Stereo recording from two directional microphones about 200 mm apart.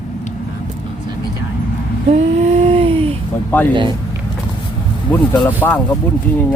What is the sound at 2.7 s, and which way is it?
Speech, 30° right (ahead or behind).